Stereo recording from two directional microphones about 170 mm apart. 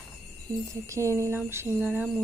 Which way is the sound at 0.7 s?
15° right (ahead or behind).